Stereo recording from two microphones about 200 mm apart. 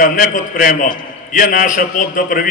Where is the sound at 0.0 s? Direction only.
45° left (ahead or behind).